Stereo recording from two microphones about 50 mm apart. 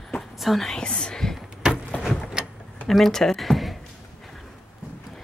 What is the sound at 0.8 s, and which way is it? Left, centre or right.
Speech, centre.